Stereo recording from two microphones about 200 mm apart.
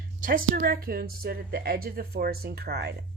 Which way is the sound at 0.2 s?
45° right (ahead or behind).